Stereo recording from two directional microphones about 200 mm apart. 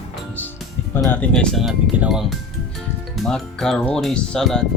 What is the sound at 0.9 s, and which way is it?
Speech, 10° left (ahead or behind).